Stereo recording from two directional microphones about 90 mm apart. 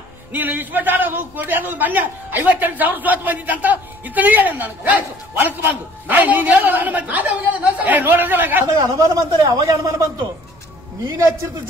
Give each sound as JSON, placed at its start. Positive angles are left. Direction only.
{"t": 0.3, "sound": "a man's voice", "side_deg": -20}
{"t": 8.9, "sound": "speech", "side_deg": -40}
{"t": 11.1, "sound": "speech", "side_deg": -35}